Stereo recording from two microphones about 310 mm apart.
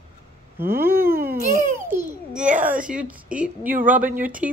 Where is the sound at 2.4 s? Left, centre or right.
Right.